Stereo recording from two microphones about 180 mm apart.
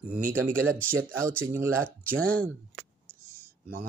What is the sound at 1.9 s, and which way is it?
Speech, 55° right (ahead or behind).